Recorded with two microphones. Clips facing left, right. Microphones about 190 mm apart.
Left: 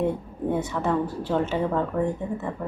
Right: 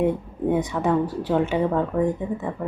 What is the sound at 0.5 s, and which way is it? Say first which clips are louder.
Speech: right 3 dB; 15° right (ahead or behind).